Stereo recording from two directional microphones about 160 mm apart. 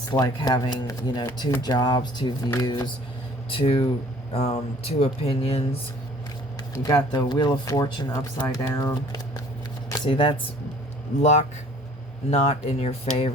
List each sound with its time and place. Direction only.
0.1 s speech: 25° left (ahead or behind)
6.7 s speech: 25° left (ahead or behind)
10.0 s speech: 35° left (ahead or behind)
11.2 s speech: 45° left (ahead or behind)